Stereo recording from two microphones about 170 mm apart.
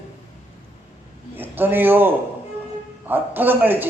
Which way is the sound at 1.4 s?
10° right (ahead or behind).